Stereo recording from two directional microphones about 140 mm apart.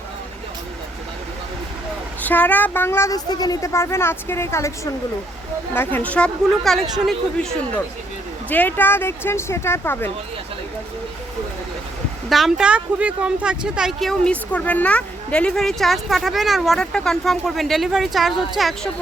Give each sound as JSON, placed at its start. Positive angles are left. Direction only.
{"t": 2.2, "sound": "speech", "side_deg": 10}
{"t": 5.7, "sound": "speech", "side_deg": 15}
{"t": 8.4, "sound": "speech", "side_deg": 10}
{"t": 12.3, "sound": "a woman's voice", "side_deg": 0}